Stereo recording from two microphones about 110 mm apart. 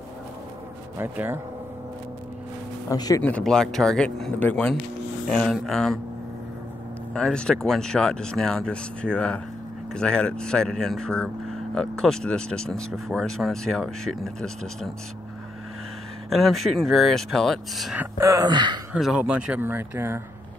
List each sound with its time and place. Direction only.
0.9 s speech: 20° right (ahead or behind)
2.9 s speech: 35° left (ahead or behind)
3.2 s speech: 10° left (ahead or behind)
5.3 s speech: centre (ahead or behind)
7.2 s speech: 5° left (ahead or behind)
16.3 s speech: centre (ahead or behind)
17.9 s speech: 25° right (ahead or behind)
18.5 s speech: 40° right (ahead or behind)
18.9 s speech: centre (ahead or behind); by 20.2 s 20° right (ahead or behind)